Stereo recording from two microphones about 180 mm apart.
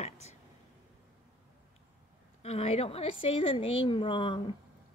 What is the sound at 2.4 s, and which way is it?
A woman's voice, 35° left (ahead or behind).